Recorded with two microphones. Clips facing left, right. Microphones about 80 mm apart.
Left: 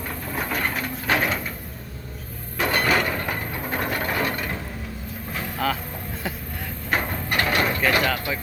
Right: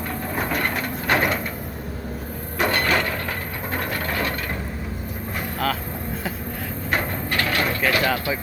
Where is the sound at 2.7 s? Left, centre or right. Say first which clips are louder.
Left 3 dB; centre.